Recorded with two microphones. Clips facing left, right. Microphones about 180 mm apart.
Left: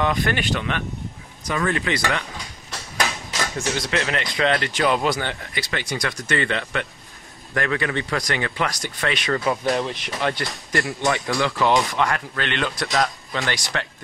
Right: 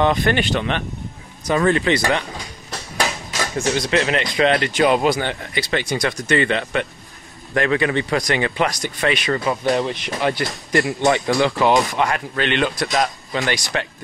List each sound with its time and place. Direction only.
0.0 s speech: 30° right (ahead or behind)
3.9 s speech: 25° right (ahead or behind)
9.2 s speech: 5° right (ahead or behind)
11.1 s speech: 30° right (ahead or behind)